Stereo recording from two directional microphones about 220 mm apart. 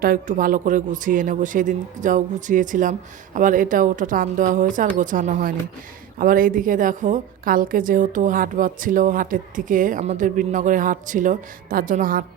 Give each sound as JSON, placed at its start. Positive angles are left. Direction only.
{"t": 0.0, "sound": "a woman's voice", "side_deg": -40}